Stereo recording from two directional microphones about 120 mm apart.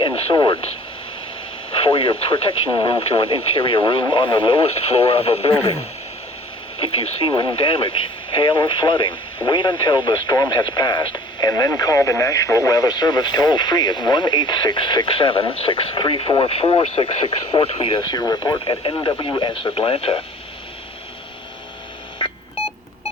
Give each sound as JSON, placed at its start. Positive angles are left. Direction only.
{"t": 0.0, "sound": "radio", "side_deg": 40}
{"t": 1.7, "sound": "speech", "side_deg": 50}
{"t": 6.9, "sound": "speech", "side_deg": 45}
{"t": 18.2, "sound": "speech", "side_deg": 30}
{"t": 18.6, "sound": "speech", "side_deg": 45}